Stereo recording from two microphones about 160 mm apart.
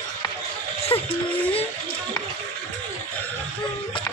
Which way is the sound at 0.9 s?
35° left (ahead or behind).